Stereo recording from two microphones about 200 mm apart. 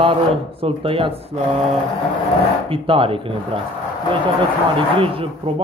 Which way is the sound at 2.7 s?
25° right (ahead or behind).